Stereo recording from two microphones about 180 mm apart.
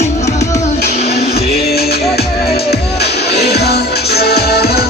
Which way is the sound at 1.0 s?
60° left (ahead or behind).